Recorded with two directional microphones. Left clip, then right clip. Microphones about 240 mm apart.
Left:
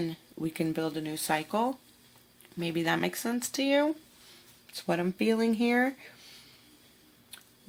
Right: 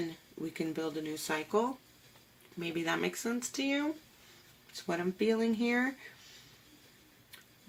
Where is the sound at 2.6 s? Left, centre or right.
Left.